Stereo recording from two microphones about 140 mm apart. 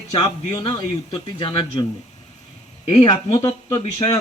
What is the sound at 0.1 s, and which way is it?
Speech, 45° left (ahead or behind).